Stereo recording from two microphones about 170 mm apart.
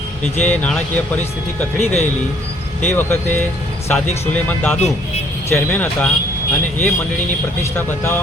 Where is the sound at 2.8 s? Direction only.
10° left (ahead or behind).